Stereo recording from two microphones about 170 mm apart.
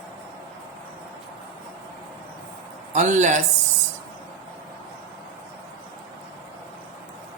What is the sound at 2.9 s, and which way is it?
Speech, 45° right (ahead or behind).